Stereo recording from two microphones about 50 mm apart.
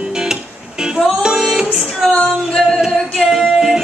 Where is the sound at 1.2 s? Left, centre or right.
Centre.